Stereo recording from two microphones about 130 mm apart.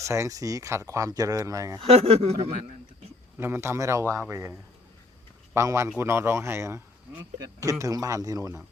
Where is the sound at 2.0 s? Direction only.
55° right (ahead or behind).